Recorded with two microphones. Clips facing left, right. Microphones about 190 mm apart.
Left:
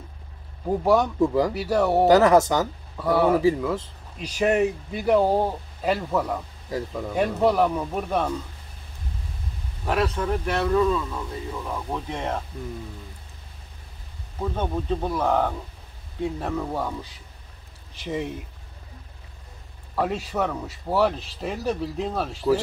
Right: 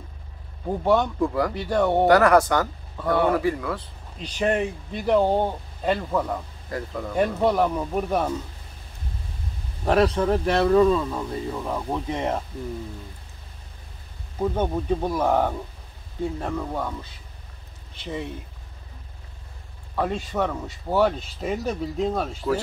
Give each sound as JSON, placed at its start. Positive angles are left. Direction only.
{"t": 0.7, "sound": "speech", "side_deg": 5}
{"t": 2.0, "sound": "speech", "side_deg": 20}
{"t": 2.6, "sound": "speech", "side_deg": 5}
{"t": 9.8, "sound": "speech", "side_deg": -35}
{"t": 11.9, "sound": "speech", "side_deg": -15}
{"t": 14.4, "sound": "speech", "side_deg": -15}
{"t": 16.2, "sound": "speech", "side_deg": 0}
{"t": 20.0, "sound": "speech", "side_deg": 5}